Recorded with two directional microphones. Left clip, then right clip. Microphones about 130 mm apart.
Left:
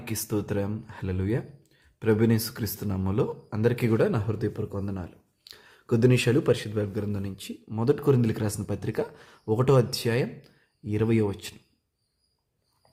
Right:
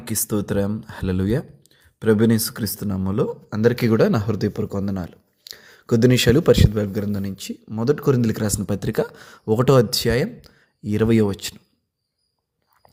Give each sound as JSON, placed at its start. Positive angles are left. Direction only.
{"t": 0.0, "sound": "speech", "side_deg": -35}
{"t": 5.4, "sound": "speech", "side_deg": -25}
{"t": 7.7, "sound": "speech", "side_deg": -15}